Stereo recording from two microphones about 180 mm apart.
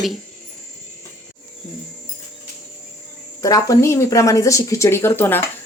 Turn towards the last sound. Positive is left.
turn(degrees=10)  # may be behind; listen again after turning